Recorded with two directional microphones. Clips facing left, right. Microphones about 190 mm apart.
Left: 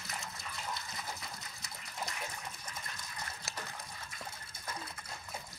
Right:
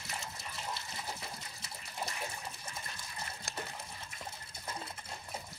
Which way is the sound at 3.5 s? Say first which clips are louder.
Right 2 dB; 30° right (ahead or behind).